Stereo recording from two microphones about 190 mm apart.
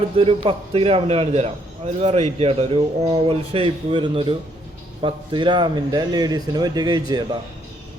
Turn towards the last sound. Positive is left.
turn(degrees=-20)  # may be behind; listen again after turning